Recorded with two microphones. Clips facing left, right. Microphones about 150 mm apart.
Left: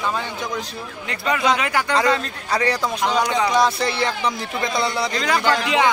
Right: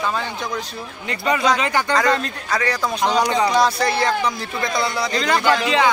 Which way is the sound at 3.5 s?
25° left (ahead or behind).